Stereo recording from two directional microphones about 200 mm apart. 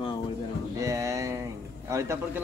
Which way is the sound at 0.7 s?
15° right (ahead or behind).